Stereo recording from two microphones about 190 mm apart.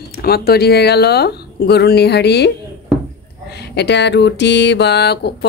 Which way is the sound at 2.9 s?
Centre (ahead or behind).